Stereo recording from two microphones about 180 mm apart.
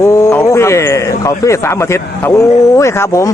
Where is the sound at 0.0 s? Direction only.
15° left (ahead or behind).